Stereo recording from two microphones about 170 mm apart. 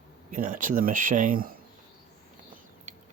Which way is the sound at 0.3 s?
50° right (ahead or behind).